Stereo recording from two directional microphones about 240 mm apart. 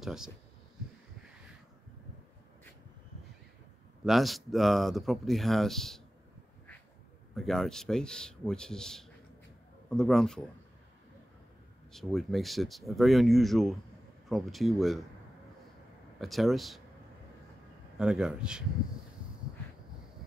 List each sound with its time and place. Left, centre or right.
0.0 s speech: centre
4.0 s speech: centre
7.3 s speech: centre
11.9 s speech: centre
16.2 s speech: centre
17.9 s speech: centre